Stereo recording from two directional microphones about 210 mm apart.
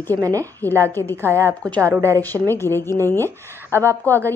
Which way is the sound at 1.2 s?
10° right (ahead or behind).